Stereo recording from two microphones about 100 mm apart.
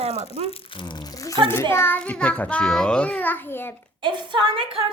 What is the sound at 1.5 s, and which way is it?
A child's voice, 25° left (ahead or behind).